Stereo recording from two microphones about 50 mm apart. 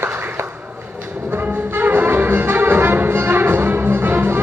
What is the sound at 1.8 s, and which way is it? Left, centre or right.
Music, right.